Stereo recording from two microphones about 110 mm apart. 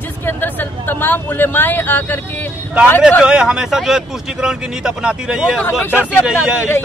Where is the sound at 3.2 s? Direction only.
5° right (ahead or behind).